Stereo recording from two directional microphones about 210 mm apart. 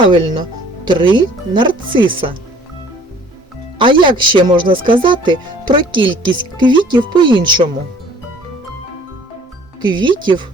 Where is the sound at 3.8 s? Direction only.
25° right (ahead or behind).